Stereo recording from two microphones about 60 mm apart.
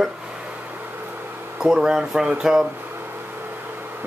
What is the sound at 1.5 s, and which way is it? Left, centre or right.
Speech, centre.